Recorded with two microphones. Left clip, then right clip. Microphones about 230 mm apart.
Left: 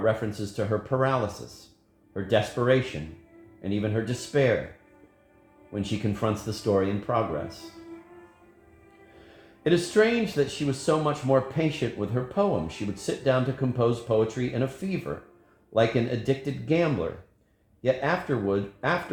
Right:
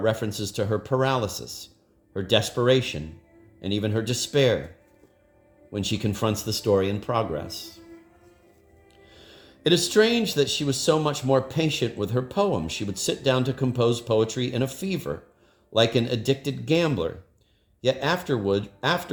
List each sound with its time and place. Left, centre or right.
0.0 s speech: right
2.1 s speech: right
5.7 s speech: right
9.6 s speech: right